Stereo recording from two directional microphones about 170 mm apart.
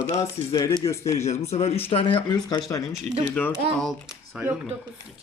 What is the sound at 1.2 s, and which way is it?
A man's voice, 40° left (ahead or behind).